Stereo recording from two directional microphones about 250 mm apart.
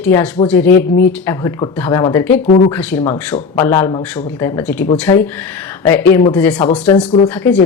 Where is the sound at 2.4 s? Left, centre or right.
Left.